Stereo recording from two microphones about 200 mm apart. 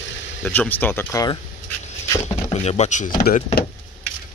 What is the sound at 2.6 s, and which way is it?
Speech, 30° left (ahead or behind).